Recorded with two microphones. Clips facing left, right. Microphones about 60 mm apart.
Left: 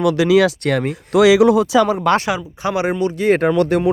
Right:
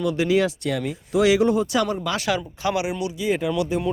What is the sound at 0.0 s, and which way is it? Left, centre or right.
Speech, left.